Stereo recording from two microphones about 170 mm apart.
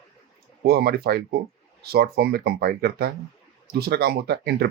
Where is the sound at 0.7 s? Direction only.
65° right (ahead or behind).